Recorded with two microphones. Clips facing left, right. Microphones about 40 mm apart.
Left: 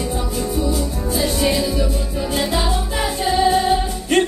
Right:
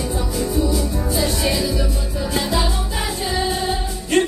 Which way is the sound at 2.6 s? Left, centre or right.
Left.